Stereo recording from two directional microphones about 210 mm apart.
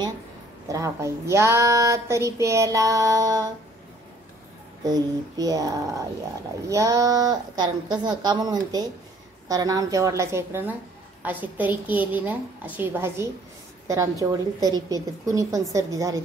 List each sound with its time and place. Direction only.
0.7 s speech: 15° right (ahead or behind)
4.8 s a woman's voice: 20° right (ahead or behind)